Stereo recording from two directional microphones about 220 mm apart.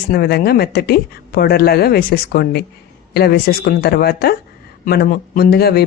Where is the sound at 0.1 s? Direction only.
45° left (ahead or behind).